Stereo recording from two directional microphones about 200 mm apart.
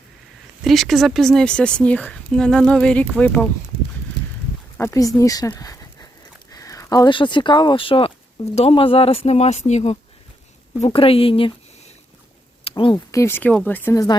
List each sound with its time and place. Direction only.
0.6 s speech: centre (ahead or behind)
4.8 s speech: 15° left (ahead or behind)
12.6 s speech: 25° left (ahead or behind)